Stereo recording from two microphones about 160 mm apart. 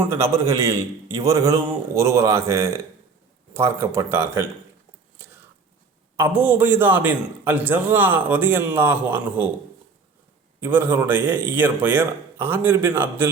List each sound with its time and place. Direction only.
0.0 s a man's voice: 15° right (ahead or behind)
6.1 s a man's voice: 10° right (ahead or behind)
10.6 s a man's voice: 10° right (ahead or behind)